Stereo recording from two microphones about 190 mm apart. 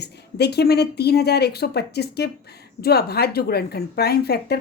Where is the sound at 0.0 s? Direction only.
60° left (ahead or behind).